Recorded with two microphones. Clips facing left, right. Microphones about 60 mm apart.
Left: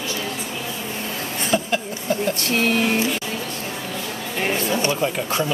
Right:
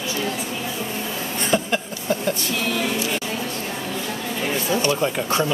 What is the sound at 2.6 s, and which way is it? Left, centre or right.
Music, left.